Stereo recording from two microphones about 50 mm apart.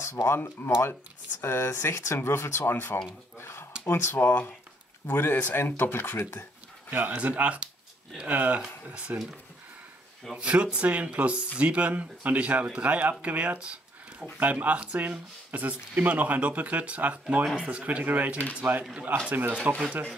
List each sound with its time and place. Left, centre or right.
0.0 s speech: left
2.7 s speech: left
3.3 s a sound: left
3.8 s speech: left
6.9 s speech: right
8.9 s speech: right
10.3 s speech: right
19.7 s speech: right